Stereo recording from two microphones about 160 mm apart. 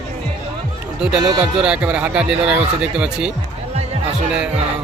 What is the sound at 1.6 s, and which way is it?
Speech, 5° right (ahead or behind).